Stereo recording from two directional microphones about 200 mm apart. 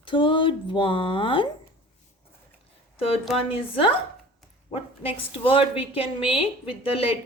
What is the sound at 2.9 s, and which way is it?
Speech, 30° left (ahead or behind).